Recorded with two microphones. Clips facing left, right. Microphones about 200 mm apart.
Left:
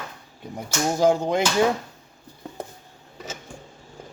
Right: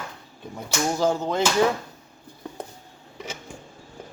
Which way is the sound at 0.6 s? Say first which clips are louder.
Left 3 dB; 15° left (ahead or behind).